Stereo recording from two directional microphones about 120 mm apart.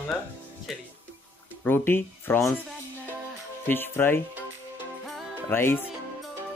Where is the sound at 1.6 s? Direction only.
20° left (ahead or behind).